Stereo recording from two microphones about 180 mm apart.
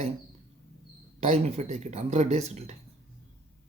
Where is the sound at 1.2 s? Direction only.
35° right (ahead or behind).